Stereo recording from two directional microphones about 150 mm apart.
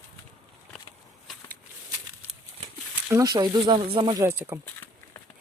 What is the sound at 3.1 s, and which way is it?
Speech, 20° right (ahead or behind).